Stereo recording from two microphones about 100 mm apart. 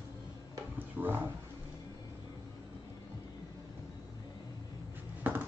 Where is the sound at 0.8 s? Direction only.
20° right (ahead or behind).